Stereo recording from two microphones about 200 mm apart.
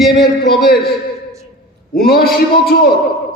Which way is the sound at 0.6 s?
50° left (ahead or behind).